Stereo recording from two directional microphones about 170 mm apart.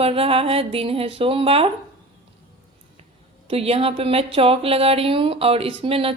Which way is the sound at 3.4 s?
35° right (ahead or behind).